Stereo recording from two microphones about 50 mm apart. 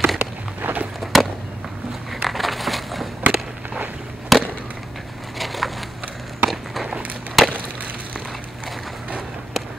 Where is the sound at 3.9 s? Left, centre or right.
Centre.